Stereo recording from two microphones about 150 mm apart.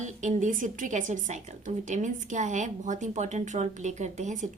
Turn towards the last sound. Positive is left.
turn(degrees=-55)  # may be behind; listen again after turning